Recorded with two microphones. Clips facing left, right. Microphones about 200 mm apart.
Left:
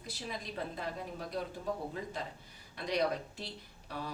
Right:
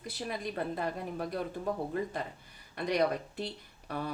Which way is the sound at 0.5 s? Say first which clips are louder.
Right 4 dB; 60° right (ahead or behind).